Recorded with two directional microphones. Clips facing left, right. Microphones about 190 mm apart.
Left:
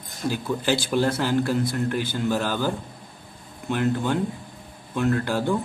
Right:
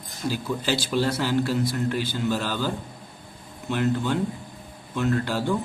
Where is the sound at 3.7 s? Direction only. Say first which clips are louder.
Left 1 dB; 50° left (ahead or behind).